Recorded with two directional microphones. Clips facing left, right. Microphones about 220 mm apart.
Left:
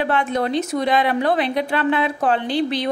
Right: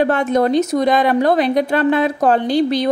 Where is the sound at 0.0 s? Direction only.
45° right (ahead or behind).